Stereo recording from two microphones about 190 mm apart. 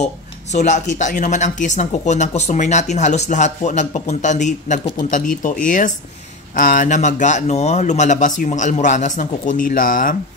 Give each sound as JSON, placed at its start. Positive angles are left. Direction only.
{"t": 0.0, "sound": "speech", "side_deg": 40}